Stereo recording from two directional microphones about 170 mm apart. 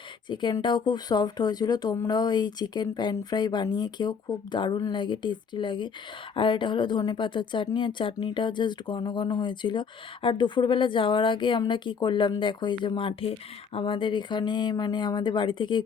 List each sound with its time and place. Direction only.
0.3 s speech: 25° left (ahead or behind)